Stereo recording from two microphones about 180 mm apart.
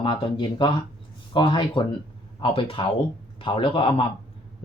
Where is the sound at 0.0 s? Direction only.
25° left (ahead or behind).